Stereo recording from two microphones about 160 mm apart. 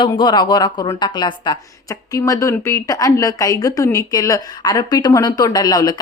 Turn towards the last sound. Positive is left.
turn(degrees=25)  # may be behind; listen again after turning